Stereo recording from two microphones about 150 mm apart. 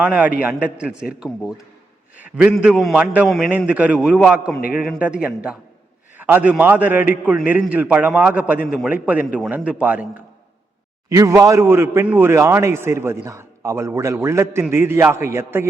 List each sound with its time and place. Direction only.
0.0 s a man's voice: 10° right (ahead or behind)
11.1 s a man's voice: 20° right (ahead or behind)